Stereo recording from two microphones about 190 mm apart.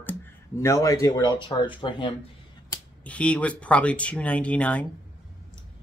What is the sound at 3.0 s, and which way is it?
Speech, 5° left (ahead or behind).